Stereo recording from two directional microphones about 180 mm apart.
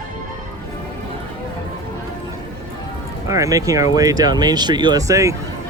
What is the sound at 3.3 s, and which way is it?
Speech, 20° right (ahead or behind).